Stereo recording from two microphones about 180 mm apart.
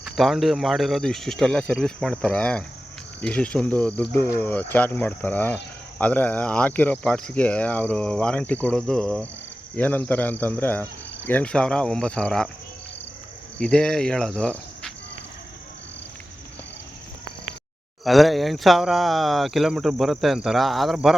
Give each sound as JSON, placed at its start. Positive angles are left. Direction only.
{"t": 0.0, "sound": "speech", "side_deg": 0}
{"t": 13.6, "sound": "cricket", "side_deg": 5}
{"t": 18.0, "sound": "speech", "side_deg": 0}